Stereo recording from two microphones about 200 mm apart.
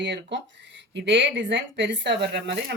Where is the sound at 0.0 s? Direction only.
60° right (ahead or behind).